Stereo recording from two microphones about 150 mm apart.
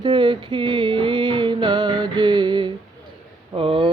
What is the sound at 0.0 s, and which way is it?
Music, 30° right (ahead or behind).